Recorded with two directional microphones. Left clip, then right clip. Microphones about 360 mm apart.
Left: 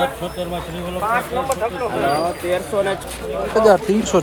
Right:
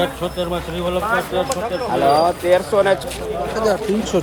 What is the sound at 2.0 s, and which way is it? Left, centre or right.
Speech, right.